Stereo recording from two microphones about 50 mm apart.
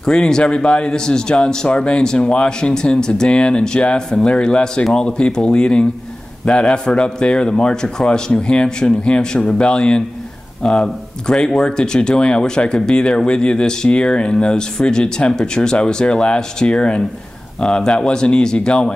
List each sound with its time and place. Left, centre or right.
0.0 s speech: centre